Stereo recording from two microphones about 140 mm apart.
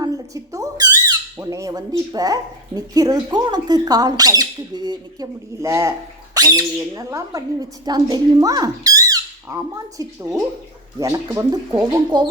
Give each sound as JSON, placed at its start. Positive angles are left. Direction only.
{"t": 0.0, "sound": "speech", "side_deg": -25}